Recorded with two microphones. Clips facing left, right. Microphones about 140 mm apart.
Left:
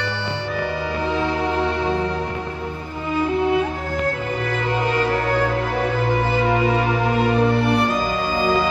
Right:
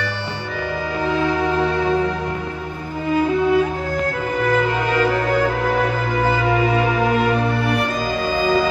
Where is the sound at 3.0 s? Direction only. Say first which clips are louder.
Right 3 dB; 50° right (ahead or behind).